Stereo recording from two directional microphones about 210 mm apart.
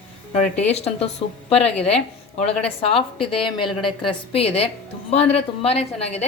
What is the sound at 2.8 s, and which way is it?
A woman's voice, 25° left (ahead or behind).